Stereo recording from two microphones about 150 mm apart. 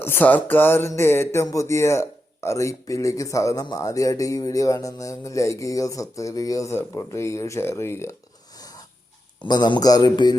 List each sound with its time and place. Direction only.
0.0 s music: 15° left (ahead or behind)
8.5 s a sound: 25° left (ahead or behind)
9.4 s music: 30° left (ahead or behind)